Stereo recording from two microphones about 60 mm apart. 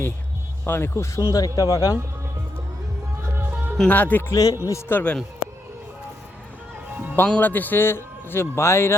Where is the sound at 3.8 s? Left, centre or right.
Left.